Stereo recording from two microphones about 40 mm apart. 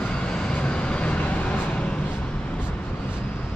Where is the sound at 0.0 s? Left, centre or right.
Left.